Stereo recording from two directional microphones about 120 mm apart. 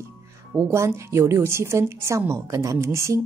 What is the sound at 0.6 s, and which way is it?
A woman's voice, 20° right (ahead or behind).